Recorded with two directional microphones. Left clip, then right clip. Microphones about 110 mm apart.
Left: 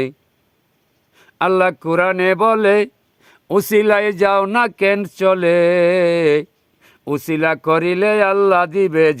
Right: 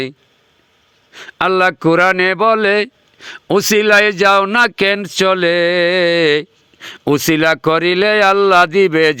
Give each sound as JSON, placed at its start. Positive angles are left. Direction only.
{"t": 1.1, "sound": "speech", "side_deg": -20}